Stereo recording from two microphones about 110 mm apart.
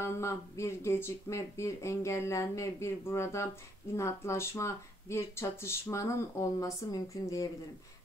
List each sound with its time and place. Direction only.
0.0 s speech: 25° left (ahead or behind)